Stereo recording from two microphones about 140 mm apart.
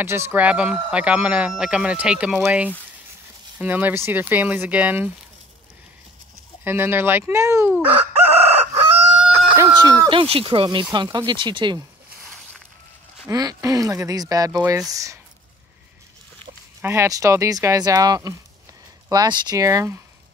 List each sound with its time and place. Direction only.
0.0 s speech: 20° right (ahead or behind)
6.6 s speech: 15° right (ahead or behind)
8.7 s chicken: 10° right (ahead or behind)
9.8 s speech: 30° right (ahead or behind)
13.3 s speech: 25° right (ahead or behind)
16.8 s speech: 20° right (ahead or behind)